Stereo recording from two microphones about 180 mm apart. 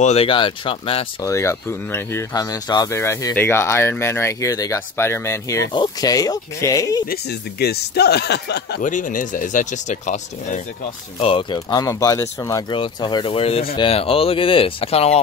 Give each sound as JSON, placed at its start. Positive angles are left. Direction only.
{"t": 0.0, "sound": "speech", "side_deg": 35}
{"t": 1.2, "sound": "speech", "side_deg": 15}
{"t": 7.1, "sound": "speech", "side_deg": 60}
{"t": 8.8, "sound": "speech", "side_deg": 45}
{"t": 11.1, "sound": "speech", "side_deg": 30}